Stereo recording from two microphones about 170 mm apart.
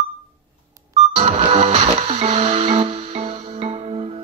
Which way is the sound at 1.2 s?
35° right (ahead or behind).